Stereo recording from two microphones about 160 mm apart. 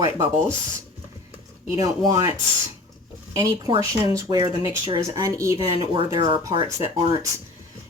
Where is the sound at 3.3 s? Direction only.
25° right (ahead or behind).